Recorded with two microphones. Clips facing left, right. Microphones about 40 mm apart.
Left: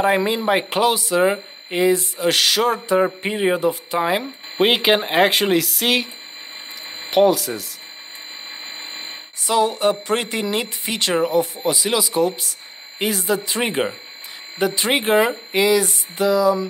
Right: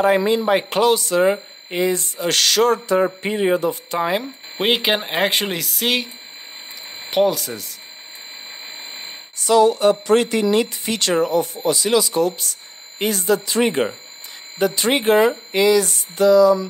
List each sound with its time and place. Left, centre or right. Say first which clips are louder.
0.0 s speech: right 2 dB; centre
8.9 s speech: left 1 dB; centre